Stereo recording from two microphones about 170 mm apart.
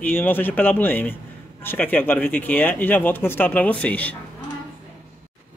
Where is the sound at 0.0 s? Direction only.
10° left (ahead or behind).